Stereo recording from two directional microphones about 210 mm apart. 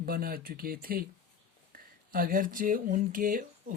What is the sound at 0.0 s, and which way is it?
Speech, 45° right (ahead or behind).